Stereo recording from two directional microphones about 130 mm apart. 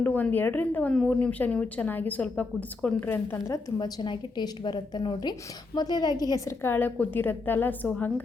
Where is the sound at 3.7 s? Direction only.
30° left (ahead or behind).